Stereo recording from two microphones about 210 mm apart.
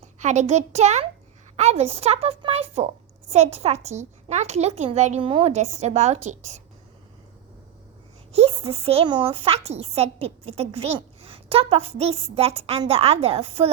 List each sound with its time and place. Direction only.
0.2 s a child's voice: 35° right (ahead or behind)
8.3 s a woman's voice: 30° right (ahead or behind)